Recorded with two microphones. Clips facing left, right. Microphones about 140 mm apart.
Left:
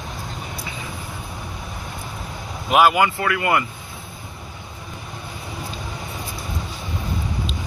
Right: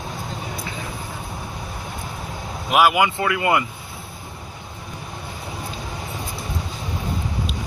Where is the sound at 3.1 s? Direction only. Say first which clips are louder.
Right 1 dB; 20° right (ahead or behind).